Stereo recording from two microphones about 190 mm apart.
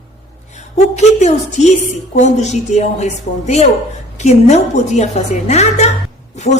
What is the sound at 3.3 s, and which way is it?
Speech, 45° left (ahead or behind).